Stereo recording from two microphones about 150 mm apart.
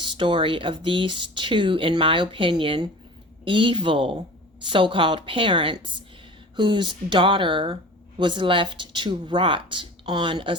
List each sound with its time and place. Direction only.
0.0 s speech: 30° right (ahead or behind)